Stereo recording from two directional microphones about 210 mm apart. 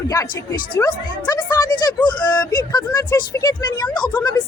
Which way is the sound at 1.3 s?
20° left (ahead or behind).